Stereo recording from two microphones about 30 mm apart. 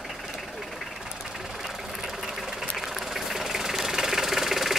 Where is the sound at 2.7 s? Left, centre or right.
Centre.